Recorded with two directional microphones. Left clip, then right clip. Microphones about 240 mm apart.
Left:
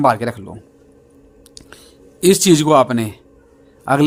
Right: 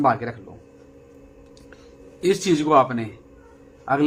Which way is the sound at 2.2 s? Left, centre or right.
Left.